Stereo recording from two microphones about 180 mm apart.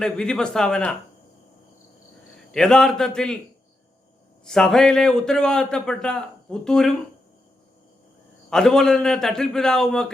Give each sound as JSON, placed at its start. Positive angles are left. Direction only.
{"t": 0.0, "sound": "a man's voice", "side_deg": 5}
{"t": 2.5, "sound": "a man's voice", "side_deg": 5}
{"t": 4.4, "sound": "a man's voice", "side_deg": 5}
{"t": 8.4, "sound": "a man's voice", "side_deg": 5}